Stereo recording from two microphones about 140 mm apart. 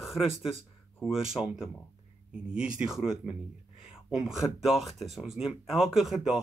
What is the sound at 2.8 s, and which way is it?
Speech, 5° right (ahead or behind).